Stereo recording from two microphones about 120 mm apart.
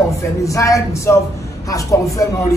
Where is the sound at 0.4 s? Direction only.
25° left (ahead or behind).